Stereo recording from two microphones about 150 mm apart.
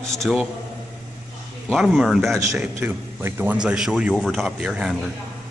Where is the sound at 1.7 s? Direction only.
Centre (ahead or behind).